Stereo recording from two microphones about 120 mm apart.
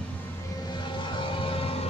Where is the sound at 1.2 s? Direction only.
50° left (ahead or behind).